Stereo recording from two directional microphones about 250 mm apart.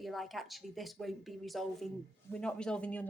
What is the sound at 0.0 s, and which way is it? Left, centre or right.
A woman's voice, centre.